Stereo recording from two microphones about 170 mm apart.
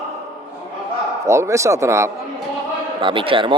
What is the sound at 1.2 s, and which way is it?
Speech, 15° right (ahead or behind).